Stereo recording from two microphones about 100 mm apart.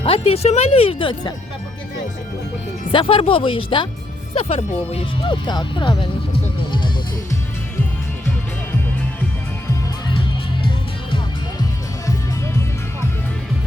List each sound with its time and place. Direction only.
0.0 s speech: 80° left; by 1.3 s 55° left (ahead or behind)
2.9 s speech: 60° left (ahead or behind)
4.4 s speech: 85° left
5.2 s speech: 50° left (ahead or behind)
6.7 s music: 50° left (ahead or behind)